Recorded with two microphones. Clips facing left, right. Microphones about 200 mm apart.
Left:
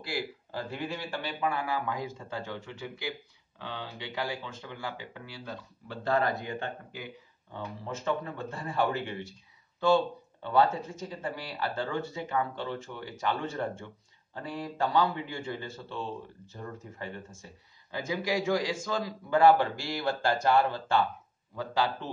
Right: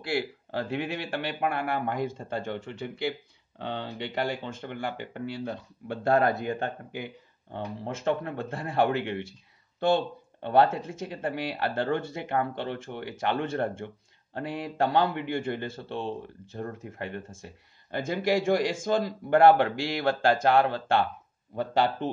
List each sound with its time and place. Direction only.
0.0 s a man's voice: 70° right (ahead or behind)
14.3 s a man's voice: 65° right (ahead or behind)
20.3 s a man's voice: 65° right (ahead or behind)